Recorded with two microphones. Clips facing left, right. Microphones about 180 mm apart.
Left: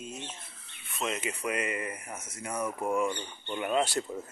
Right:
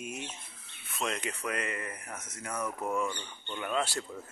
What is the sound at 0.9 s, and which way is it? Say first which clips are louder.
Speech: left 1 dB; 5° left (ahead or behind).